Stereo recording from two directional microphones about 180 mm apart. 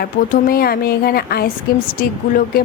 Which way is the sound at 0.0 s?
55° left (ahead or behind).